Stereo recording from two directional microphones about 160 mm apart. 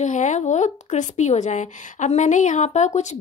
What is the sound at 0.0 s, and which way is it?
A woman's voice, 50° left (ahead or behind).